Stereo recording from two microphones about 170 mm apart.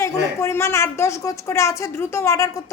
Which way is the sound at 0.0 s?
15° left (ahead or behind).